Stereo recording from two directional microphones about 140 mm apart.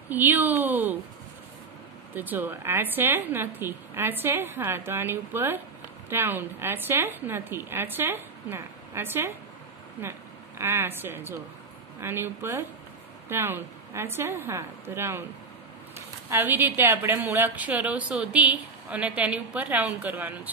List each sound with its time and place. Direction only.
0.1 s a woman's voice: 15° right (ahead or behind)
2.1 s a woman's voice: 15° right (ahead or behind)
10.6 s a woman's voice: 15° right (ahead or behind)
16.3 s a woman's voice: 15° right (ahead or behind)